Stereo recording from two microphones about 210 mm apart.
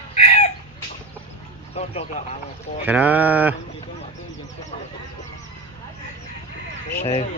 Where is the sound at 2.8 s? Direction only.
5° right (ahead or behind).